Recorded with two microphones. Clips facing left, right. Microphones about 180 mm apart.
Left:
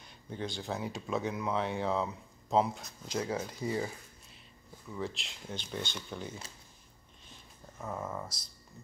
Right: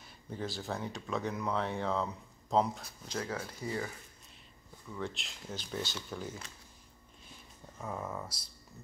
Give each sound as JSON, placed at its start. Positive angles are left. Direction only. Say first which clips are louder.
{"t": 0.0, "sound": "speech", "louder": "left 1 dB", "side_deg": -5}
{"t": 3.2, "sound": "speech", "louder": "left 4 dB", "side_deg": 20}
{"t": 4.9, "sound": "speech", "louder": "left 1 dB", "side_deg": 0}
{"t": 7.8, "sound": "speech", "louder": "left 1 dB", "side_deg": 0}